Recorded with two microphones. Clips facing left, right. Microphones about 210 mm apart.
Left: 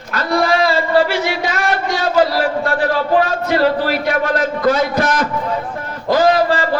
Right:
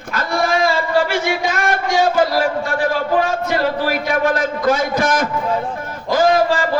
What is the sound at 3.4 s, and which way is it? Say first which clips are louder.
A man's voice: left 3 dB; 50° right (ahead or behind).